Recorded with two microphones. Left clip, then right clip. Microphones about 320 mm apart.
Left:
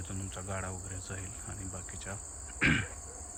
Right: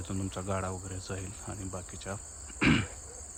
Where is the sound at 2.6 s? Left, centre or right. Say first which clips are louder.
Right 1 dB; centre.